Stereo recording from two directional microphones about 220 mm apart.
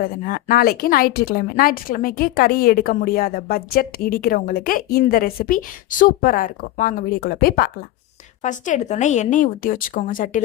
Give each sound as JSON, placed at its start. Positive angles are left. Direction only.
{"t": 0.0, "sound": "a woman's voice", "side_deg": 40}